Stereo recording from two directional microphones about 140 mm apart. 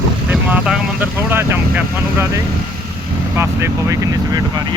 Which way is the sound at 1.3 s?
15° right (ahead or behind).